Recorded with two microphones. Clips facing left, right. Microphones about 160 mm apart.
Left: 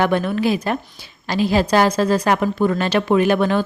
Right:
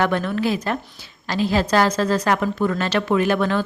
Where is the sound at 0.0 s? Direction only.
15° left (ahead or behind).